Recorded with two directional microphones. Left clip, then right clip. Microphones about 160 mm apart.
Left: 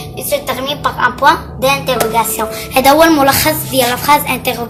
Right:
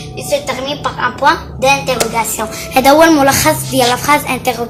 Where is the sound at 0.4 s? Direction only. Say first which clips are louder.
Left 1 dB; 5° right (ahead or behind).